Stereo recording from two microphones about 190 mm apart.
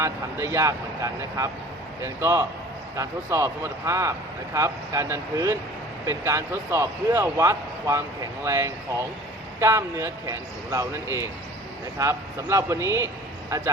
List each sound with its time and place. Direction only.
0.0 s speech: 15° right (ahead or behind)